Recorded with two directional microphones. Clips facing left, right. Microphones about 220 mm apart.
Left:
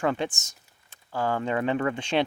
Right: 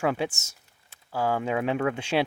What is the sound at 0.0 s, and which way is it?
Speech, 5° right (ahead or behind).